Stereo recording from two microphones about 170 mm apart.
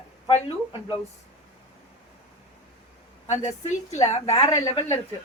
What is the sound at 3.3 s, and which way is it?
Speech, 45° left (ahead or behind).